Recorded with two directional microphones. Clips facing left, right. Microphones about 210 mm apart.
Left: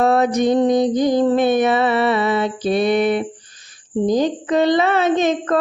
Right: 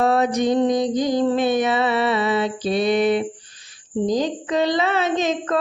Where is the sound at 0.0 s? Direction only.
55° left (ahead or behind).